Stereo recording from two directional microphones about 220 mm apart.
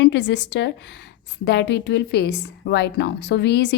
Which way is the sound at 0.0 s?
50° left (ahead or behind).